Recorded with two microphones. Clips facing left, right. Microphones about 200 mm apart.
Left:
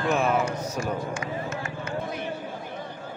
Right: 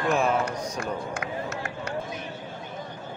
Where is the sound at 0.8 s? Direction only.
60° right (ahead or behind).